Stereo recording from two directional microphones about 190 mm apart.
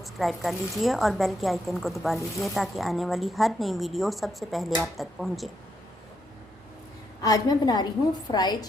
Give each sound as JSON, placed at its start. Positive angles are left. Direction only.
{"t": 0.0, "sound": "a woman's voice", "side_deg": 0}
{"t": 7.2, "sound": "a woman's voice", "side_deg": 20}